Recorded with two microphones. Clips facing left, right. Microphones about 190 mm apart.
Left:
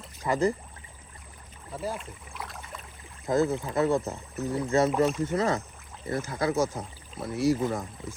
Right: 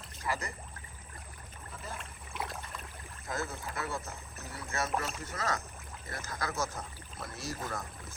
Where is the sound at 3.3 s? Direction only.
20° left (ahead or behind).